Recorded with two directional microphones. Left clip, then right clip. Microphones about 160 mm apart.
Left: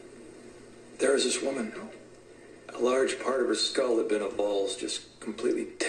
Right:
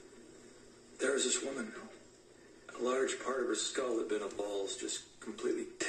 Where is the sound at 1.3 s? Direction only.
25° left (ahead or behind).